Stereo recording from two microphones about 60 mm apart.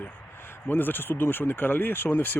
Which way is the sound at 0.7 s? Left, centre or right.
Left.